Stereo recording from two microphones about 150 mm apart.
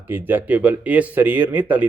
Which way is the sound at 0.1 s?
10° right (ahead or behind).